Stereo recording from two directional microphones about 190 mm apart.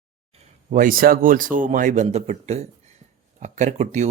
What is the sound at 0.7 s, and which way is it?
A man's voice, 45° right (ahead or behind).